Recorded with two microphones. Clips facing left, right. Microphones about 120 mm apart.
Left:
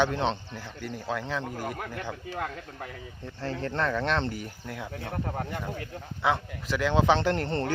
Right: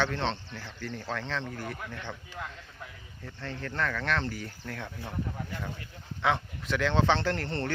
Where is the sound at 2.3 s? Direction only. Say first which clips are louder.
Left 7 dB; 60° left (ahead or behind).